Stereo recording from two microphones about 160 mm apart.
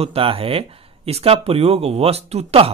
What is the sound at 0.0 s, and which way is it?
Speech, 35° right (ahead or behind).